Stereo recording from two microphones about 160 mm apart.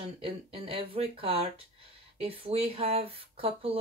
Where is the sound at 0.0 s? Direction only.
35° right (ahead or behind).